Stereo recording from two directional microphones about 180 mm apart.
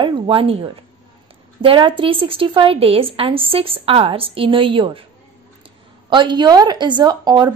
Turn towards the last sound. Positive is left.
turn(degrees=-25)  # may be behind; listen again after turning